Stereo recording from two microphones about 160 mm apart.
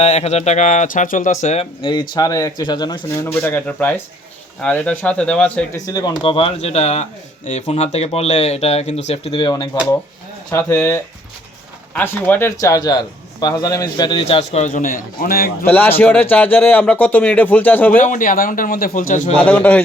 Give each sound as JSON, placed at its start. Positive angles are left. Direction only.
{"t": 0.0, "sound": "speech", "side_deg": 40}
{"t": 1.8, "sound": "a man's voice", "side_deg": 30}
{"t": 5.7, "sound": "speech", "side_deg": 20}
{"t": 10.5, "sound": "a man's voice", "side_deg": 15}
{"t": 14.5, "sound": "a man's voice", "side_deg": 50}
{"t": 15.6, "sound": "a man's voice", "side_deg": 10}
{"t": 17.9, "sound": "a man's voice", "side_deg": 55}
{"t": 19.5, "sound": "a man's voice", "side_deg": 10}